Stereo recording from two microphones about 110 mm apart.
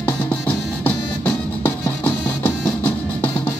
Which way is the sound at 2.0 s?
15° left (ahead or behind).